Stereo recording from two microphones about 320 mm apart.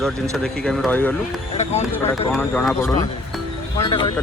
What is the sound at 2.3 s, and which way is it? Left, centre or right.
Speech, centre.